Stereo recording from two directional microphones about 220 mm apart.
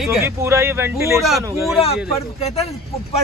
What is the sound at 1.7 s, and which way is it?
Speech, 25° left (ahead or behind).